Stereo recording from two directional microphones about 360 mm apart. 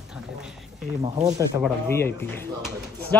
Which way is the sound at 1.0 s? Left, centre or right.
Centre.